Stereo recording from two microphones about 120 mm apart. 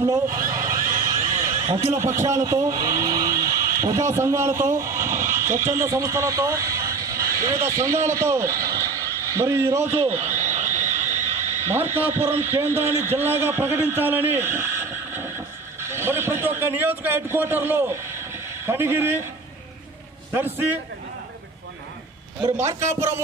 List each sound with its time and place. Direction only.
0.0 s neigh: 30° right (ahead or behind)
1.7 s a man's voice: 20° right (ahead or behind)
10.3 s frog: 90° right
10.9 s a sound: 80° right
11.3 s a man's voice: 20° right (ahead or behind)
20.5 s a man's voice: 15° right (ahead or behind)
22.6 s a man's voice: 25° right (ahead or behind)